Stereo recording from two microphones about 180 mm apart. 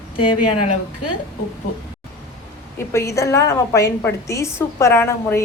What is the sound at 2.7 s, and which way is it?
A woman's voice, 15° left (ahead or behind).